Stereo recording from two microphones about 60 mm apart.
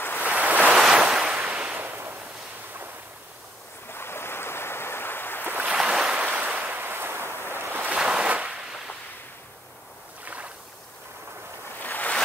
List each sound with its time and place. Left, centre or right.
0.2 s waves: right
0.7 s waves: centre
1.7 s a sound: right
3.9 s a sound: left
5.4 s waves: right
5.7 s waves: centre
6.7 s a sound: right
7.5 s ocean: right
7.9 s ocean: centre
10.2 s boat: right
11.8 s boat: left